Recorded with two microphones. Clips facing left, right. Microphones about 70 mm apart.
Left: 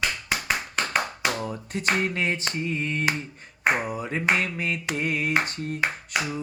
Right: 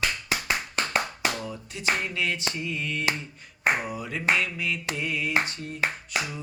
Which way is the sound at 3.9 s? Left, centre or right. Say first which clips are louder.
Left 2 dB; left.